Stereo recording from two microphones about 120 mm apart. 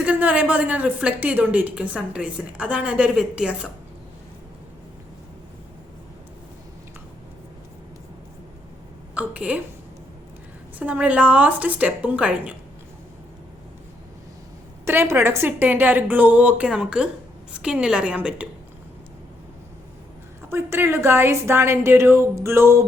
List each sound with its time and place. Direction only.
0.0 s a woman's voice: 10° right (ahead or behind)
9.1 s a woman's voice: 10° right (ahead or behind)
10.8 s a woman's voice: 10° right (ahead or behind)
14.8 s a woman's voice: 20° right (ahead or behind)
20.5 s a woman's voice: 20° right (ahead or behind)